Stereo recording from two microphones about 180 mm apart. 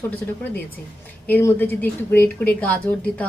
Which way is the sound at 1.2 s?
10° left (ahead or behind).